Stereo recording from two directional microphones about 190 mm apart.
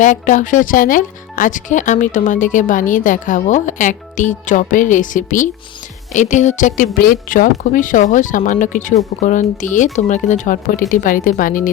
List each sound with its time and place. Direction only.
0.0 s speech: 40° left (ahead or behind)